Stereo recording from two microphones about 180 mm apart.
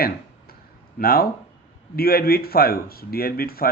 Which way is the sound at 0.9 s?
55° left (ahead or behind).